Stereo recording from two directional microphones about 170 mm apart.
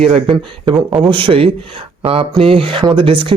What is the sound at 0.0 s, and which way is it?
Speech, 35° right (ahead or behind).